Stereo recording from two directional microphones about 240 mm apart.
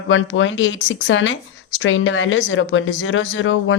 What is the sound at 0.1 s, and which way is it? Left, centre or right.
Speech, left.